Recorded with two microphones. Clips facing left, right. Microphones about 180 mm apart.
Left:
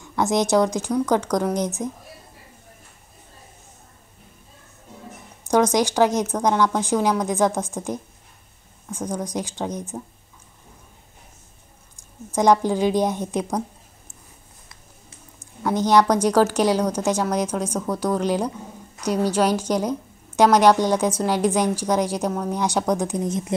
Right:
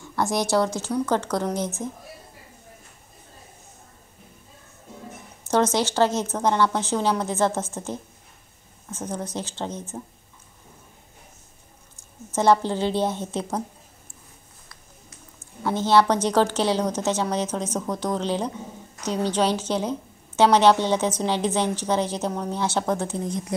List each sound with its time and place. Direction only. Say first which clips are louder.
0.1 s a woman's voice: left 3 dB; 20° left (ahead or behind)
5.4 s a woman's voice: left 3 dB; 15° left (ahead or behind)
12.0 s a woman's voice: left 3 dB; 15° left (ahead or behind)
14.7 s a sound: right 1 dB; 20° left (ahead or behind)
15.7 s a woman's voice: left 2 dB; 15° left (ahead or behind)